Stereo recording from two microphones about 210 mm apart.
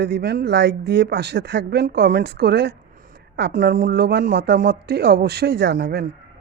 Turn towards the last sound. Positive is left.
turn(degrees=-55)  # may be behind; listen again after turning